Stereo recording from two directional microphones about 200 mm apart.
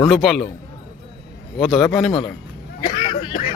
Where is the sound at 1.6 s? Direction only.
Centre (ahead or behind).